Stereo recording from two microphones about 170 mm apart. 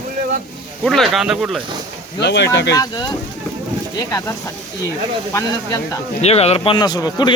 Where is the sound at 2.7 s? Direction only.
25° left (ahead or behind).